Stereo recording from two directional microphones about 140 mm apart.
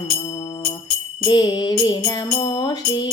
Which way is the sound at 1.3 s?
30° left (ahead or behind).